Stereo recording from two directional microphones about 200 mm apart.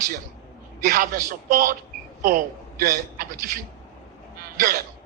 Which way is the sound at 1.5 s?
45° right (ahead or behind).